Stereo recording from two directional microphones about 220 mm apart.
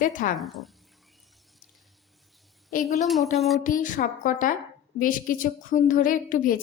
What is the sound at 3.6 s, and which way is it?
A woman's voice, 40° left (ahead or behind).